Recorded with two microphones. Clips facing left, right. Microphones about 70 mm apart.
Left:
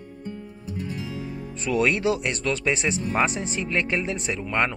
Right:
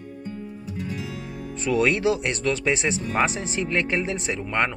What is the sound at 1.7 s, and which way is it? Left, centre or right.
A man's voice, right.